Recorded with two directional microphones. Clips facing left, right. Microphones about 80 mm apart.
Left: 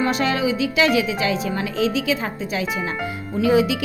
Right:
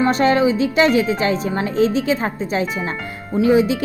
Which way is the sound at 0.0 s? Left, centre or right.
Right.